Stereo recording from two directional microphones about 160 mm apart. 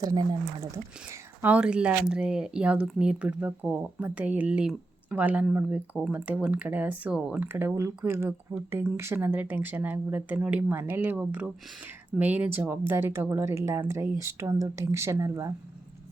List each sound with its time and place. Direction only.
0.0 s speech: 25° right (ahead or behind)
1.4 s speech: 10° right (ahead or behind)